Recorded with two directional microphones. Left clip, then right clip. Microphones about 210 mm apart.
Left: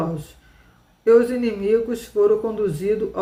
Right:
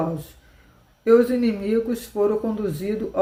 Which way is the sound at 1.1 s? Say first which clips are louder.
Left 1 dB; 20° right (ahead or behind).